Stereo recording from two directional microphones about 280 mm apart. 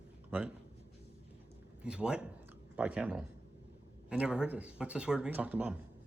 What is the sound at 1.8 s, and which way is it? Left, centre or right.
Speech, centre.